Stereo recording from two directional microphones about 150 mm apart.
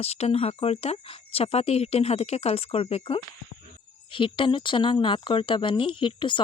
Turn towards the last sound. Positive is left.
turn(degrees=30)  # may be behind; listen again after turning